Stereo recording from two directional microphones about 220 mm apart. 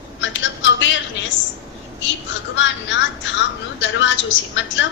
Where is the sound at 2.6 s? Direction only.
55° left (ahead or behind).